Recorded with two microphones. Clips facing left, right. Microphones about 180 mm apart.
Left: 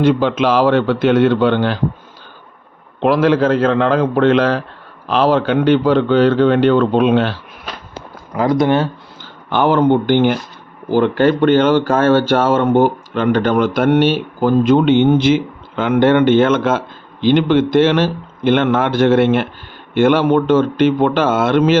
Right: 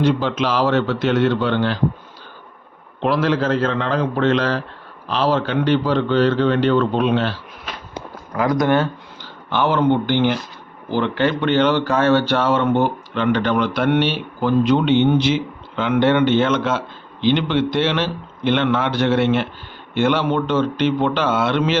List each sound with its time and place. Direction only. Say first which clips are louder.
0.0 s a man's voice: left 5 dB; 55° left (ahead or behind)
3.0 s a man's voice: left 6 dB; 55° left (ahead or behind)
8.4 s speech: left 4 dB; 30° left (ahead or behind)
9.5 s speech: left 4 dB; 50° left (ahead or behind)